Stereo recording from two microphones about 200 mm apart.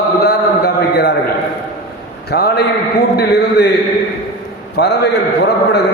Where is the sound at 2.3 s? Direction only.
55° left (ahead or behind).